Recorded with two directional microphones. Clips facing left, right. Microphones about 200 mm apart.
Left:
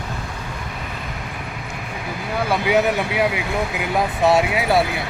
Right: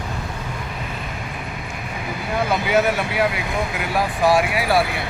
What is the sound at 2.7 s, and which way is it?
Speech, 15° left (ahead or behind).